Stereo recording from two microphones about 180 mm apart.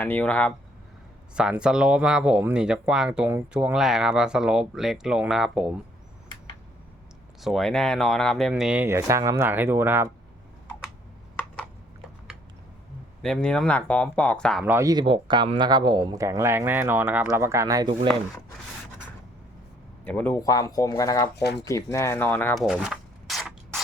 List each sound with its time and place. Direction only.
0.0 s speech: 10° left (ahead or behind)
1.4 s speech: 5° right (ahead or behind)
7.4 s speech: centre (ahead or behind)
13.2 s speech: 5° left (ahead or behind)
14.6 s speech: 15° right (ahead or behind)
20.1 s speech: 10° left (ahead or behind)
22.6 s mechanisms: 5° right (ahead or behind)